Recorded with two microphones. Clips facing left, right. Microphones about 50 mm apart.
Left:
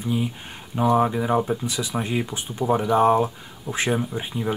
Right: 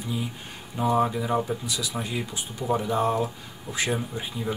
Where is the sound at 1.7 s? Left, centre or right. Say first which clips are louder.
Left 4 dB; left.